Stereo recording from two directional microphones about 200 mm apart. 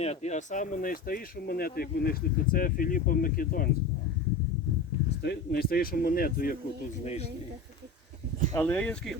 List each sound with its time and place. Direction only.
0.0 s speech: 35° left (ahead or behind)
5.2 s speech: 50° left (ahead or behind)
8.5 s speech: 10° left (ahead or behind)